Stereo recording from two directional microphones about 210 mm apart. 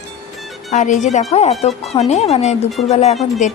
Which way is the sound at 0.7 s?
35° left (ahead or behind).